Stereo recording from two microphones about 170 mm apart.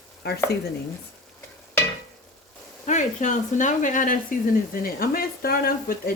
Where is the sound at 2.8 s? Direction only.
45° left (ahead or behind).